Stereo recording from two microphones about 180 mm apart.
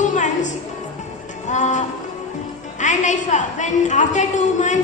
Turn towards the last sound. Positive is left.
turn(degrees=40)  # may be behind; listen again after turning